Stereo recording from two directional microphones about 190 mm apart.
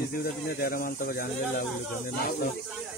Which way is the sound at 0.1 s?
50° left (ahead or behind).